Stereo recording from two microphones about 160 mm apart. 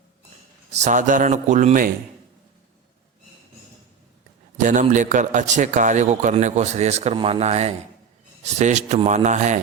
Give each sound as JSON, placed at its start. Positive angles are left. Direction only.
{"t": 0.7, "sound": "a man's voice", "side_deg": -50}
{"t": 4.5, "sound": "a man's voice", "side_deg": -50}